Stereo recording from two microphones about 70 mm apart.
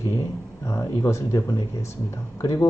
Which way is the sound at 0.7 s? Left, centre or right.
Left.